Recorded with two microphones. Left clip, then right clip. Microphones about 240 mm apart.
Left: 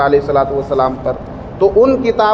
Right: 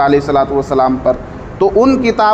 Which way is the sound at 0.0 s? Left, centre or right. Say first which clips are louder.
Right 1 dB; right.